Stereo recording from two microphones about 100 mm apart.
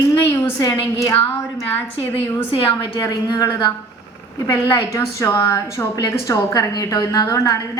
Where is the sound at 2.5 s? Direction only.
65° left (ahead or behind).